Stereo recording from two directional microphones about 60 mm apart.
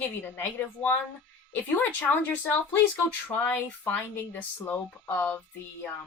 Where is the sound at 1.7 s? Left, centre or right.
Left.